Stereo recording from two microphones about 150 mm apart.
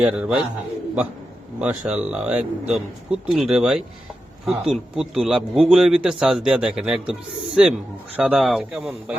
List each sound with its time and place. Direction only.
0.0 s a man's voice: 10° right (ahead or behind)
1.6 s speech: 10° right (ahead or behind)